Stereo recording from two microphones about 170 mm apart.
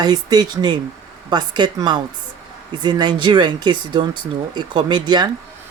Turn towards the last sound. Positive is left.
turn(degrees=-25)  # may be behind; listen again after turning